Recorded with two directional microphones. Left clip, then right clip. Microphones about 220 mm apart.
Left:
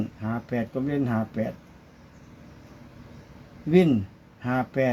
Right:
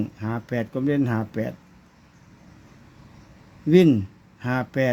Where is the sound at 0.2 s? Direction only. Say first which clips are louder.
Even; 50° right (ahead or behind).